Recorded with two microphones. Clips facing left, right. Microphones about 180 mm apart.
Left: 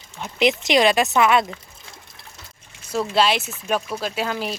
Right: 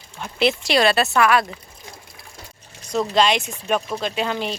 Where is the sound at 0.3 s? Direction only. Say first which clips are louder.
Left 1 dB; 15° left (ahead or behind).